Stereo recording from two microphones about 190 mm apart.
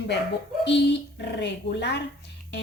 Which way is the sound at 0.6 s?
65° left (ahead or behind).